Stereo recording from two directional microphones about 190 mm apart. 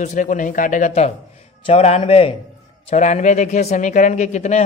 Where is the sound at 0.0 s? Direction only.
40° left (ahead or behind).